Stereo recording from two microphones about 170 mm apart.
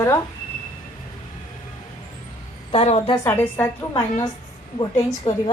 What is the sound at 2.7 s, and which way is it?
Speech, 35° left (ahead or behind).